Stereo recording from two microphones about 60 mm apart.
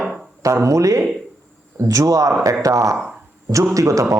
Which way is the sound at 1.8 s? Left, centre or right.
Right.